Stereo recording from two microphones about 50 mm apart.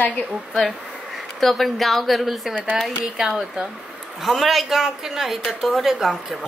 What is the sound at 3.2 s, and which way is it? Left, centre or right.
Speech, centre.